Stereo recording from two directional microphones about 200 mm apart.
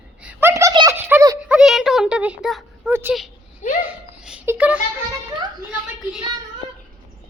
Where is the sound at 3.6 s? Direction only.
35° left (ahead or behind).